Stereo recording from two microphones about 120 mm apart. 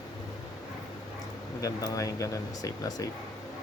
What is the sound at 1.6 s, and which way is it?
Speech, 30° left (ahead or behind).